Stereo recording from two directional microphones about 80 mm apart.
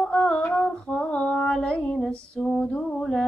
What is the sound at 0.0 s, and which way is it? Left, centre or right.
Female singing, centre.